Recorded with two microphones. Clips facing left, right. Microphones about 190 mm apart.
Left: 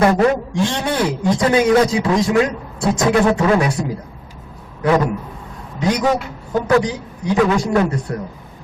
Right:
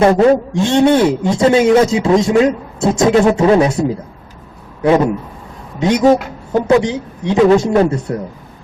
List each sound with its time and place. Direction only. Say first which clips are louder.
0.0 s a man's voice: right 5 dB; 25° right (ahead or behind)